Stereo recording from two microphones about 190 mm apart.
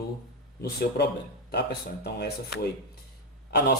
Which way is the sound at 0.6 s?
60° left (ahead or behind).